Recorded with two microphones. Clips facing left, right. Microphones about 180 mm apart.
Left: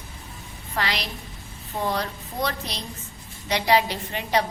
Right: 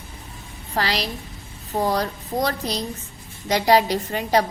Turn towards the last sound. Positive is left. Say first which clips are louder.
# right 4 dB
turn(degrees=-40)  # may be behind; listen again after turning